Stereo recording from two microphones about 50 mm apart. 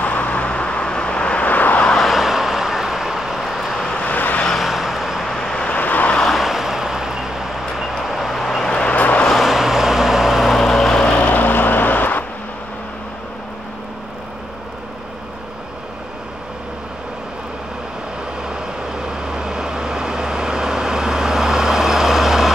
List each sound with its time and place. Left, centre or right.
0.0 s vehicle: left
1.5 s vehicle: left
2.0 s vehicle: centre
4.0 s vehicle: left
4.6 s vehicle: centre
5.3 s vehicle: centre
5.8 s vehicle: left
6.2 s vehicle: centre
8.4 s vehicle: centre
9.0 s vehicle: left
9.4 s vehicle: centre
11.1 s vehicle: left
18.5 s vehicle: centre